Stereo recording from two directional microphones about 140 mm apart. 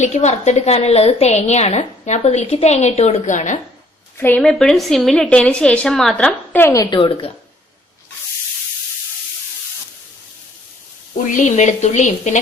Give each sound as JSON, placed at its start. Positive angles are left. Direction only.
{"t": 0.0, "sound": "a woman's voice", "side_deg": 55}
{"t": 4.2, "sound": "a woman's voice", "side_deg": 10}
{"t": 6.9, "sound": "a woman's voice", "side_deg": 40}
{"t": 11.3, "sound": "speech", "side_deg": 60}